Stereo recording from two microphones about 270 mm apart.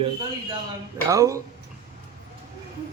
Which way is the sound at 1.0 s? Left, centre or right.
Centre.